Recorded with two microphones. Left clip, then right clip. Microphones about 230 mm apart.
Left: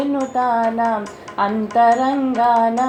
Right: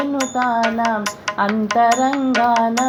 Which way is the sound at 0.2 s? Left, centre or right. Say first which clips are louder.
Even; right.